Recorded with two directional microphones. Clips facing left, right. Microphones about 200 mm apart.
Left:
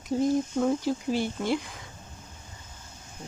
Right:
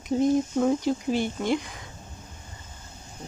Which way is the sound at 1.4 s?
5° left (ahead or behind).